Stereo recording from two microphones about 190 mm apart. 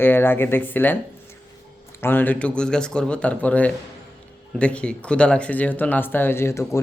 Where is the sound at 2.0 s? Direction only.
10° left (ahead or behind).